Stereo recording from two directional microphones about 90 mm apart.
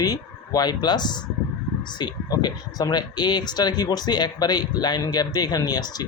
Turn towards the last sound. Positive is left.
turn(degrees=45)  # may be behind; listen again after turning